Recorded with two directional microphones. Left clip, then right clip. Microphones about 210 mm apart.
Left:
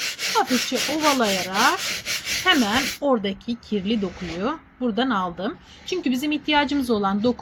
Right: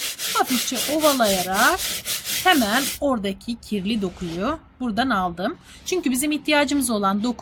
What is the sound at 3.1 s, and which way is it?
A woman's voice, 50° right (ahead or behind).